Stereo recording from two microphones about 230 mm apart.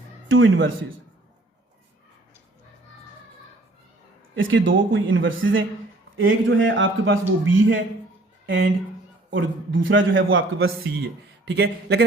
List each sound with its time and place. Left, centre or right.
0.3 s a man's voice: right
4.4 s a man's voice: right
10.8 s speech: right